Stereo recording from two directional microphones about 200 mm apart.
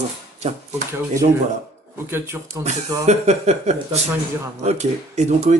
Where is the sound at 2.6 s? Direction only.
35° right (ahead or behind).